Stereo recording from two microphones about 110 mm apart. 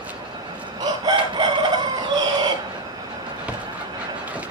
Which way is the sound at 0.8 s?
40° right (ahead or behind).